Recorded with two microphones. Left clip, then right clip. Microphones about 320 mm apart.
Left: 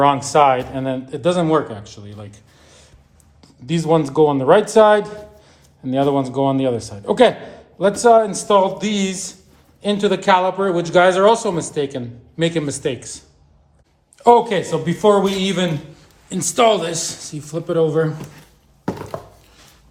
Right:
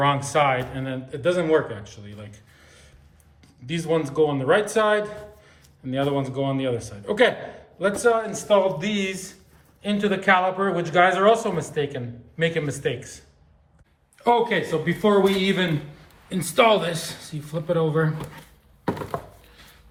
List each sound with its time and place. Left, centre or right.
0.0 s speech: centre